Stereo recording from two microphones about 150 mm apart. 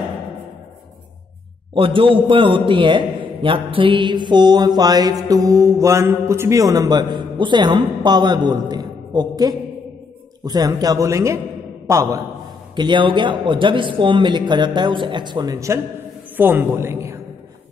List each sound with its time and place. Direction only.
1.7 s a man's voice: 35° right (ahead or behind)
3.4 s mantra: 35° right (ahead or behind); by 12.2 s 20° right (ahead or behind)
12.7 s a man's voice: 30° right (ahead or behind)